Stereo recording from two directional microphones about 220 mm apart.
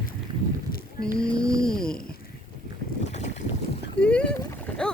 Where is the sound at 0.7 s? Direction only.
40° left (ahead or behind).